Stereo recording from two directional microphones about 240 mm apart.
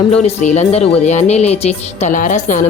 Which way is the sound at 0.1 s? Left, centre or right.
Left.